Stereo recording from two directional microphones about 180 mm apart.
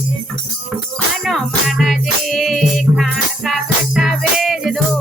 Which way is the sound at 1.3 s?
Centre (ahead or behind).